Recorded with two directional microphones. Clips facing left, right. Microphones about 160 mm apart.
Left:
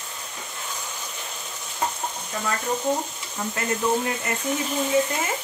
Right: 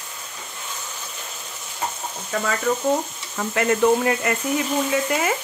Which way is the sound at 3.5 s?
75° right (ahead or behind).